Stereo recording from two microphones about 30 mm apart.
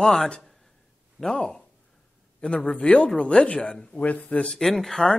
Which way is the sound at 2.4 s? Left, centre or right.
Left.